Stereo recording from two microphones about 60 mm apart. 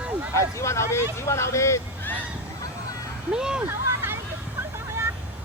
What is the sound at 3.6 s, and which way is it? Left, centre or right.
Hubbub, right.